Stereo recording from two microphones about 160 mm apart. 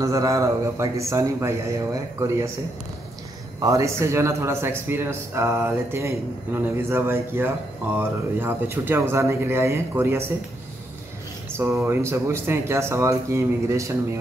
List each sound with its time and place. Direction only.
0.0 s a man's voice: 20° right (ahead or behind)
3.5 s a man's voice: 20° right (ahead or behind)
11.5 s a man's voice: 15° right (ahead or behind)